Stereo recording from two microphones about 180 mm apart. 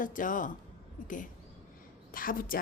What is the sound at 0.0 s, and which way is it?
A woman's voice, 45° left (ahead or behind).